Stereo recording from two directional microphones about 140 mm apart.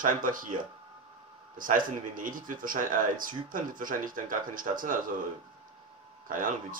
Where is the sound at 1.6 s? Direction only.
75° right (ahead or behind).